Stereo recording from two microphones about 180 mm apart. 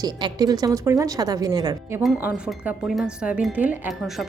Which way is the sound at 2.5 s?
Centre (ahead or behind).